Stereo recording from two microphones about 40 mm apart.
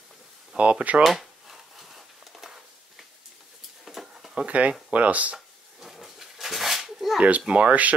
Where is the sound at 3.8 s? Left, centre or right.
Centre.